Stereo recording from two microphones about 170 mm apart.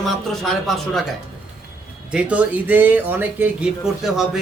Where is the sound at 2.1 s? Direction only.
10° right (ahead or behind).